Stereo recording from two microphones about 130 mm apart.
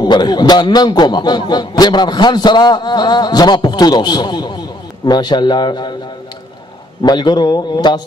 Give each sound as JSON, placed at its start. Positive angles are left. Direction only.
{"t": 0.0, "sound": "a man's voice", "side_deg": 35}
{"t": 7.0, "sound": "a man's voice", "side_deg": 35}